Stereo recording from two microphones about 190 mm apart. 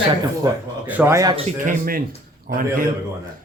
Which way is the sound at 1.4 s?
40° right (ahead or behind).